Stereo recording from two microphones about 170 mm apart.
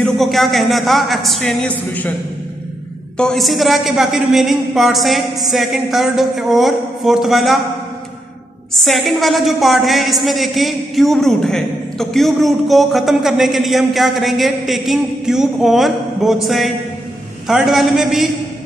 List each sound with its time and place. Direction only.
0.0 s a woman's voice: centre (ahead or behind)
3.2 s a woman's voice: centre (ahead or behind)
8.7 s a woman's voice: centre (ahead or behind)